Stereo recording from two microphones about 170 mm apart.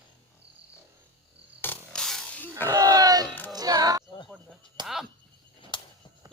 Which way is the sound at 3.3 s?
10° left (ahead or behind).